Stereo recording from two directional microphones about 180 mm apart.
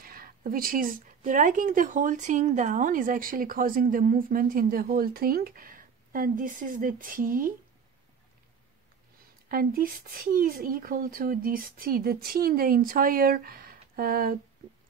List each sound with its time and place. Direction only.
0.0 s speech: 55° right (ahead or behind)
9.5 s speech: 55° right (ahead or behind)